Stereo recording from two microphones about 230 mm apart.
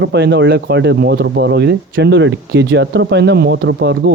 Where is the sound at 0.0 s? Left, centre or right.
Right.